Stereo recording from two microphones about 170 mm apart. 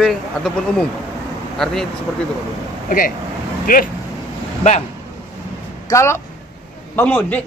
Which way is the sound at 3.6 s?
55° left (ahead or behind).